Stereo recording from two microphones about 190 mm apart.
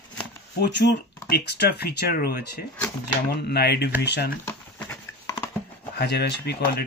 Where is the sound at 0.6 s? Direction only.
60° left (ahead or behind).